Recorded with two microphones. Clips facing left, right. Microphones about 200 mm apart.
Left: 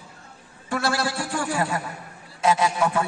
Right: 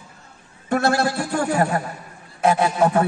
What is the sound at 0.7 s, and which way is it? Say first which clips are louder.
A man's voice: right 6 dB; 55° right (ahead or behind).